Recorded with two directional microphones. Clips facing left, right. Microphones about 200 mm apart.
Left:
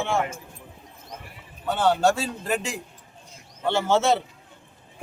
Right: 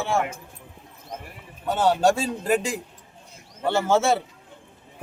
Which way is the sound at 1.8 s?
15° right (ahead or behind).